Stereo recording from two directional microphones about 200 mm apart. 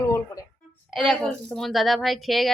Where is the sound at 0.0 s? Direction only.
15° left (ahead or behind).